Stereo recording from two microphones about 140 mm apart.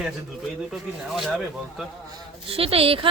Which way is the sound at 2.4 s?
45° right (ahead or behind).